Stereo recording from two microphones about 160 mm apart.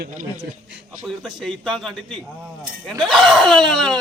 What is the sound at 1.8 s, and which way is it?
A man's voice, 5° left (ahead or behind).